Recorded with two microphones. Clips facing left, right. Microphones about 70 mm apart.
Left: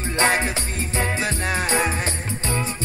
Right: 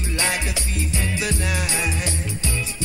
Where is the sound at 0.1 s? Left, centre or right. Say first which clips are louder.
Left 5 dB; left.